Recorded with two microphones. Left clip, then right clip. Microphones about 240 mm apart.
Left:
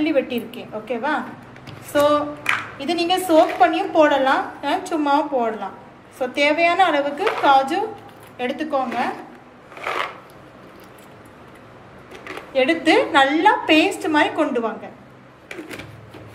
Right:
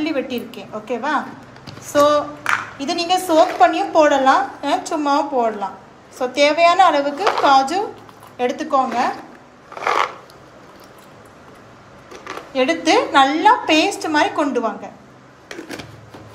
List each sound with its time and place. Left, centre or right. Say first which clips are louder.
0.0 s a woman's voice: left 2 dB; right
12.5 s a woman's voice: even; right